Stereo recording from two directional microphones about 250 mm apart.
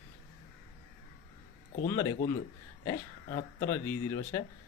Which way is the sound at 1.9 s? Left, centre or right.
Centre.